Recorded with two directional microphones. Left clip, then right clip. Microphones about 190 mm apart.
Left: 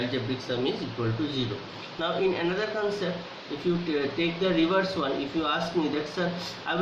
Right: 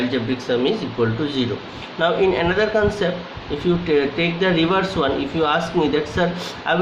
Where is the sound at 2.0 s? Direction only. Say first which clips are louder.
Right 9 dB; 55° right (ahead or behind).